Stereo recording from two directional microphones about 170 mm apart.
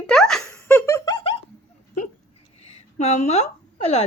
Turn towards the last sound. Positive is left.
turn(degrees=40)  # may be behind; listen again after turning